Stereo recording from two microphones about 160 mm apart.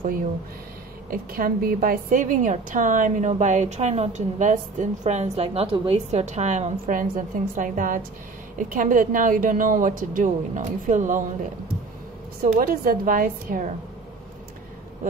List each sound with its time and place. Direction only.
1.1 s a woman's voice: 65° right (ahead or behind)
12.4 s a woman's voice: 65° right (ahead or behind)